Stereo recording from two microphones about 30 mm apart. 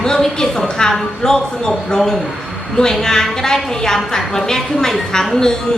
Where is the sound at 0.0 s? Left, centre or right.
Left.